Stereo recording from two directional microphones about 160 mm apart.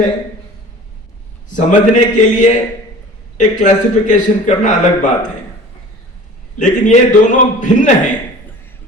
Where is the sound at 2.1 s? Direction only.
50° left (ahead or behind).